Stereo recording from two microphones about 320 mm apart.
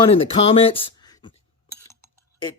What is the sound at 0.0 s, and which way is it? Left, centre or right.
Speech, centre.